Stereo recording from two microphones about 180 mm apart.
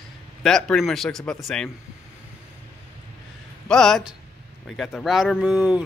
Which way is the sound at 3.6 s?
5° left (ahead or behind).